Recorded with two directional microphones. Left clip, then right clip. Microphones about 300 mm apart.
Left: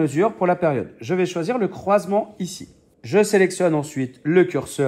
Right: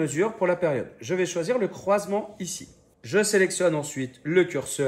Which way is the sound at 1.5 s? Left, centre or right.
Left.